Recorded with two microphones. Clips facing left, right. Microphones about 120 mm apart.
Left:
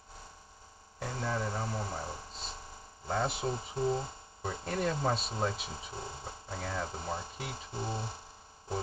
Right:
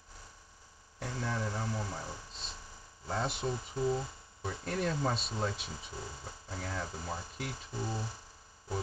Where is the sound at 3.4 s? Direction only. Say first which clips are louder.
Left 1 dB; 30° left (ahead or behind).